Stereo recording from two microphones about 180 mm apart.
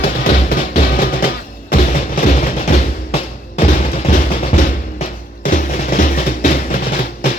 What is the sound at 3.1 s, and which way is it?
Music, 35° left (ahead or behind).